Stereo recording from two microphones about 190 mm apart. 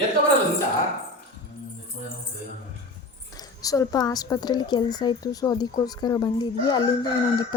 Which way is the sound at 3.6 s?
20° left (ahead or behind).